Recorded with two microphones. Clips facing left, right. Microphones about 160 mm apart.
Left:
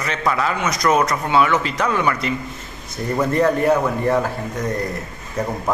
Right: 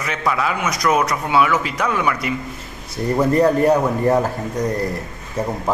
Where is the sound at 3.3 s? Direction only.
35° right (ahead or behind).